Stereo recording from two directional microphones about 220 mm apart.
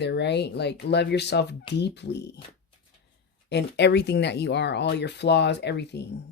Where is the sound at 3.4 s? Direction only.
50° left (ahead or behind).